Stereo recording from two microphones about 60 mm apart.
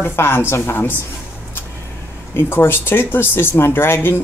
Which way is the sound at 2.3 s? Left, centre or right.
Left.